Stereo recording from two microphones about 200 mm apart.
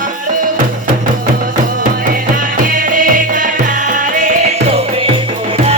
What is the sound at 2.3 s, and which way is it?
Music, 45° right (ahead or behind).